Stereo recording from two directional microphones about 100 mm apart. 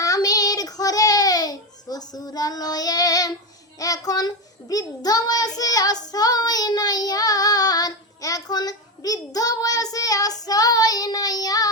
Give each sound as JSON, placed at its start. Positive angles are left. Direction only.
{"t": 0.0, "sound": "child singing", "side_deg": 35}